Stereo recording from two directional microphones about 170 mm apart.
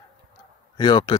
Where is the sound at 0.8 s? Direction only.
25° left (ahead or behind).